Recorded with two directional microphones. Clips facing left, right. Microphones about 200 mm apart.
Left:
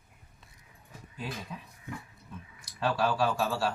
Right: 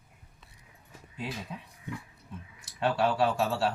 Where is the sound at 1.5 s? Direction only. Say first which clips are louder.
Right 1 dB; 25° right (ahead or behind).